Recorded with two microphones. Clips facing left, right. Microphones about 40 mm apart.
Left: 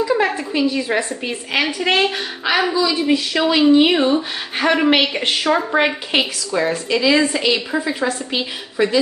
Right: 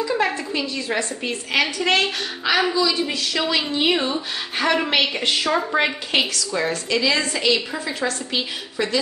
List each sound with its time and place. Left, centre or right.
0.0 s a woman's voice: centre